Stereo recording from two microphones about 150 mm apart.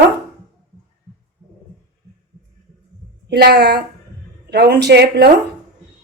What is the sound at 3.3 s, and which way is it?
A woman's voice, 90° right.